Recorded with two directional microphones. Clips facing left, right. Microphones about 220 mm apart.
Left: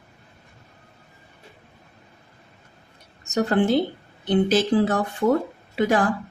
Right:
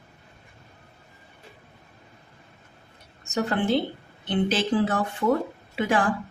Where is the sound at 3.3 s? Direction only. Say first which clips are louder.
Left 4 dB; 40° left (ahead or behind).